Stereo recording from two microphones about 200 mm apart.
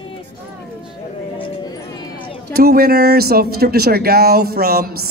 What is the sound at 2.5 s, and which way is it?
A man's voice, 50° right (ahead or behind).